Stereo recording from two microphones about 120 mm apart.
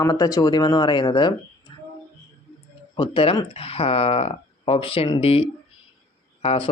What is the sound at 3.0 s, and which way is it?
Speech, 45° left (ahead or behind).